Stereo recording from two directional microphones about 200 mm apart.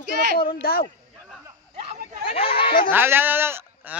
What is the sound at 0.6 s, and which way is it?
Speech, 50° left (ahead or behind).